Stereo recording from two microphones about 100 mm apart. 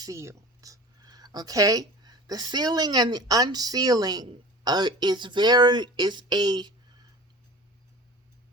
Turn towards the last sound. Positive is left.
turn(degrees=-45)  # may be behind; listen again after turning